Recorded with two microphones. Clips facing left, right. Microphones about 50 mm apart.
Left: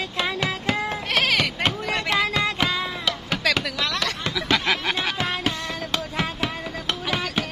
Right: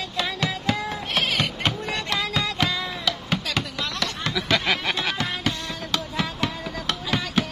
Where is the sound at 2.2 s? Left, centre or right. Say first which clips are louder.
Left 5 dB; left.